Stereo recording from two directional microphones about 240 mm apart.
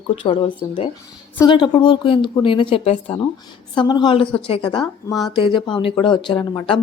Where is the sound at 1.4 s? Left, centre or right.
Centre.